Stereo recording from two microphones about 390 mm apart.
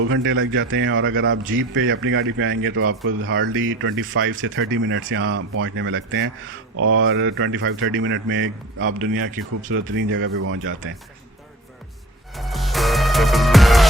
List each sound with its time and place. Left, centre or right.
0.0 s speech: right
9.3 s speech: centre
12.3 s music: centre